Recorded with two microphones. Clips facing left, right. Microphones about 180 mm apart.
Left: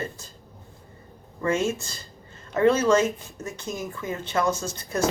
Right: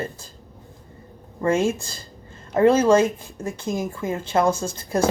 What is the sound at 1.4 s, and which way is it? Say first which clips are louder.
Speech: right 4 dB; 30° right (ahead or behind).